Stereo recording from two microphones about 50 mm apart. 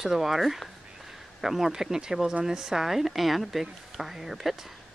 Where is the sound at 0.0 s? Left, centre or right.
Centre.